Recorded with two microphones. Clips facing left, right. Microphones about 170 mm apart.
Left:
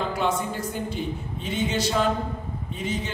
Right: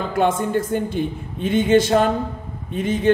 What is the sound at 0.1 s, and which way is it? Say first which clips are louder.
A man's voice: right 7 dB; 50° right (ahead or behind).